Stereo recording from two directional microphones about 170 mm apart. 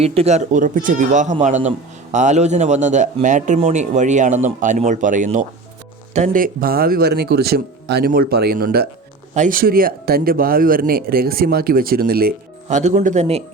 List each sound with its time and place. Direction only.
0.0 s a man's voice: 35° right (ahead or behind); by 8.9 s 60° right (ahead or behind)
9.3 s speech: 50° right (ahead or behind)
12.6 s a man's voice: 45° right (ahead or behind)